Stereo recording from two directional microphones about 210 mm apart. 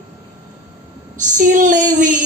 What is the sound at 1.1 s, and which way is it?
Speech, 40° right (ahead or behind).